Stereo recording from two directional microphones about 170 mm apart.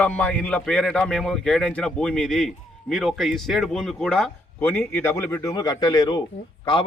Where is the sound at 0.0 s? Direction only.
10° left (ahead or behind).